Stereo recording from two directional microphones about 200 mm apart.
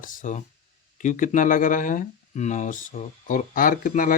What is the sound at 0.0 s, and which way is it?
Speech, 40° left (ahead or behind).